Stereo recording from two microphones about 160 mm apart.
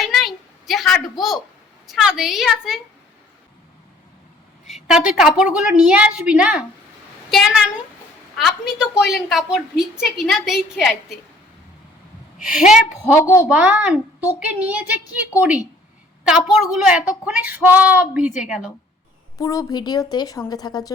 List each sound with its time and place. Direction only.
0.0 s a sound: centre (ahead or behind)
1.9 s a woman's voice: 5° right (ahead or behind)
4.6 s a sound: centre (ahead or behind)
5.4 s a woman's voice: 5° right (ahead or behind)
8.4 s a woman's voice: centre (ahead or behind)
12.5 s a woman's voice: 5° right (ahead or behind)
13.1 s a woman's voice: 15° left (ahead or behind)
13.5 s a woman's voice: 5° right (ahead or behind)
19.4 s a woman's voice: 20° left (ahead or behind)